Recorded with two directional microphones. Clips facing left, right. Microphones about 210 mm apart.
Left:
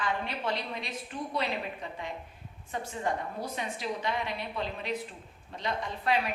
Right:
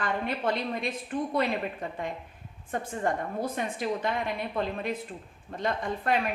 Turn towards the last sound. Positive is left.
turn(degrees=-50)  # may be behind; listen again after turning